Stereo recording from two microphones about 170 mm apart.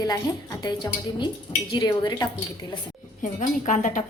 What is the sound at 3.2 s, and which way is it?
Speech, 45° left (ahead or behind).